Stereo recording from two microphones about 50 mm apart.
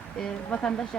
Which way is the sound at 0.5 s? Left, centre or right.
Left.